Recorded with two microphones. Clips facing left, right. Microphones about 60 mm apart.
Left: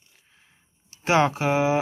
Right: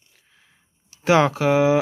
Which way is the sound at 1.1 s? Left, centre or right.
Right.